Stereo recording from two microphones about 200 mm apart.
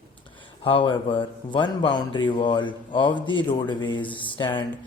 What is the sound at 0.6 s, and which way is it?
Speech, 25° left (ahead or behind).